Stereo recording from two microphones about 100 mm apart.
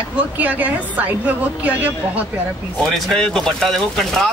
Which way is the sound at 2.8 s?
5° left (ahead or behind).